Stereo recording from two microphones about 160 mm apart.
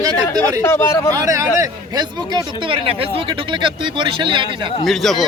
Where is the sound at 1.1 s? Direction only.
20° right (ahead or behind).